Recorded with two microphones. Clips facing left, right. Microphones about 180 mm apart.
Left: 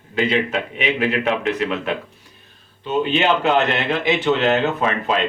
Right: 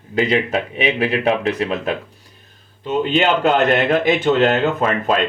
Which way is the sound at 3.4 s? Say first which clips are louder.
Right 3 dB; 45° right (ahead or behind).